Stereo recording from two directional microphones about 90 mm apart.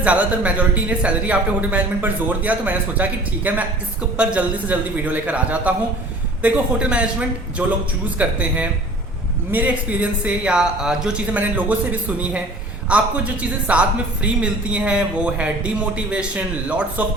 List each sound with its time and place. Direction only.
0.0 s speech: 15° right (ahead or behind)